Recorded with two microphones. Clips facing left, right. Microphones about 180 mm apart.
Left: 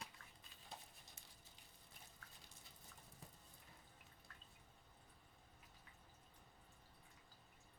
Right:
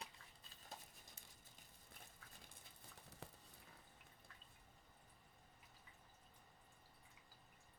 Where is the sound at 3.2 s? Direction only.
75° right (ahead or behind).